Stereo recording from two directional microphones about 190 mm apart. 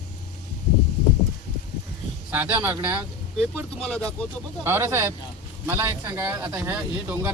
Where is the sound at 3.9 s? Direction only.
5° left (ahead or behind).